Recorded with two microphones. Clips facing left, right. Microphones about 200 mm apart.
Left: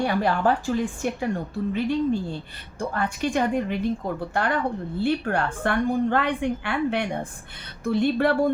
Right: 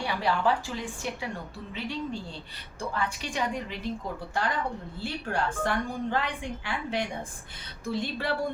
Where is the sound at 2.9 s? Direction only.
55° left (ahead or behind).